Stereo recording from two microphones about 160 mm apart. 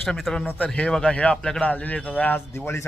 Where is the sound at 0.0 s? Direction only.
Centre (ahead or behind).